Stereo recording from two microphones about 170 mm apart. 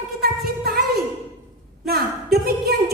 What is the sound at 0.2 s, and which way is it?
Music, 65° right (ahead or behind).